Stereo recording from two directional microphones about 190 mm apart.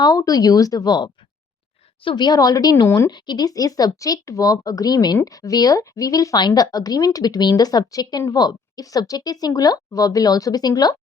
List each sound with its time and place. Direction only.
0.0 s speech: 20° left (ahead or behind)